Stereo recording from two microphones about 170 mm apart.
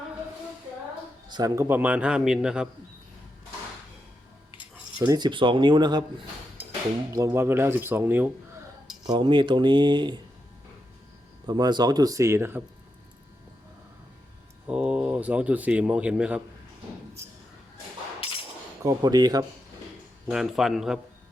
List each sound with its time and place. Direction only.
1.3 s a man's voice: 20° right (ahead or behind); by 2.6 s 5° right (ahead or behind)
5.0 s speech: 25° right (ahead or behind)
7.1 s a man's voice: 15° right (ahead or behind)
9.0 s speech: 25° right (ahead or behind)
11.4 s speech: 25° right (ahead or behind)
14.7 s speech: 5° right (ahead or behind)
18.8 s speech: 20° right (ahead or behind)
20.2 s a man's voice: centre (ahead or behind)